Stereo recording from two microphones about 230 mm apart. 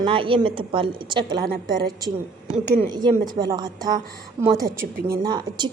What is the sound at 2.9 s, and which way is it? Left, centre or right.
A woman's voice, centre.